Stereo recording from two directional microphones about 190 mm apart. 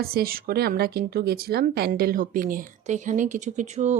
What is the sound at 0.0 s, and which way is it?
Speech, 55° right (ahead or behind).